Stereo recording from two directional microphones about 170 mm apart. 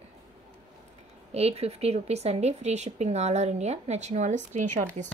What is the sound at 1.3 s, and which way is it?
Speech, 35° right (ahead or behind).